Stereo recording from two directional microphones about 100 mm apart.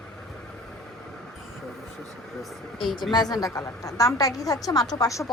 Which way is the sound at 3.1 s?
40° left (ahead or behind).